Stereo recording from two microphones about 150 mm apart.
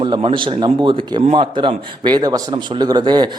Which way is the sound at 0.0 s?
30° right (ahead or behind).